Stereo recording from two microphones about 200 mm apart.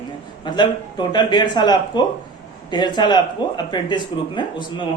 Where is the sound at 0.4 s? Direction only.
25° left (ahead or behind).